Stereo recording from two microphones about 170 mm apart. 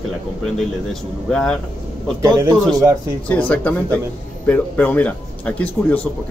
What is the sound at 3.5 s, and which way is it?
A man's voice, 10° left (ahead or behind).